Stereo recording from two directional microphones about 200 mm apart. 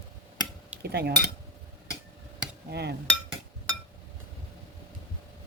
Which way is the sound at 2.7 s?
55° right (ahead or behind).